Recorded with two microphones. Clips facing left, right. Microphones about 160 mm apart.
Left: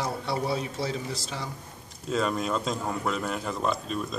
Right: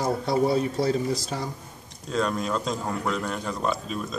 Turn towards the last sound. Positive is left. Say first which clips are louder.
# right 1 dB
turn(degrees=0)  # may be behind; listen again after turning